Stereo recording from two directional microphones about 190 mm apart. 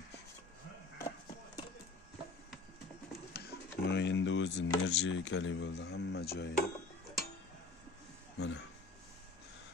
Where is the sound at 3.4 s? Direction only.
55° left (ahead or behind).